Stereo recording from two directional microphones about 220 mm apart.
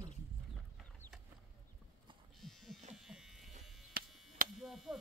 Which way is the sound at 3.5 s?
35° right (ahead or behind).